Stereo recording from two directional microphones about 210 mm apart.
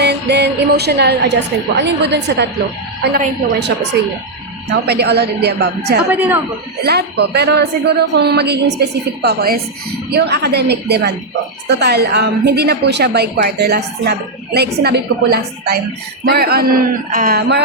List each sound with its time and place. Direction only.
0.0 s music: 55° right (ahead or behind)
1.8 s a woman's voice: 55° right (ahead or behind)
4.9 s a woman's voice: 50° right (ahead or behind)
6.1 s speech: 10° right (ahead or behind)
6.8 s a woman's voice: 50° right (ahead or behind)